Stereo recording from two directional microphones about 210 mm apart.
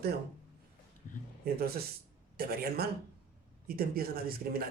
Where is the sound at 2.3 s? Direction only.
45° right (ahead or behind).